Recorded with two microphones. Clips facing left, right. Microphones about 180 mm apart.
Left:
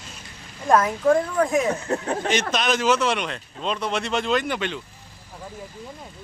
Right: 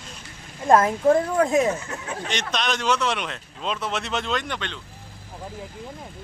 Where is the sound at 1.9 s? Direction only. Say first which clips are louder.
Left 10 dB; 35° left (ahead or behind).